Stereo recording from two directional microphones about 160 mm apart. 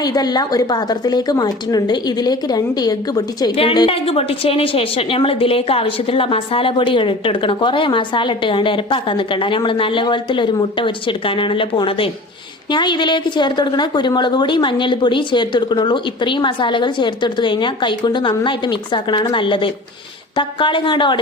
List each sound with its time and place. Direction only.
0.0 s a woman's voice: 25° left (ahead or behind)
3.7 s a woman's voice: 35° left (ahead or behind)